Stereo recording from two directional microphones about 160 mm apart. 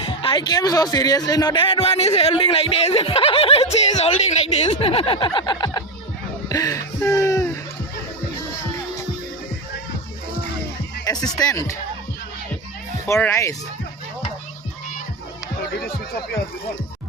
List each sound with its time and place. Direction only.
0.2 s a man's voice: 30° left (ahead or behind)
11.0 s speech: 25° left (ahead or behind)
13.1 s speech: 15° left (ahead or behind)